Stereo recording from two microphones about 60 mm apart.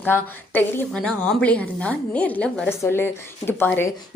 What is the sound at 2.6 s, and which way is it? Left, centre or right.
A woman's voice, left.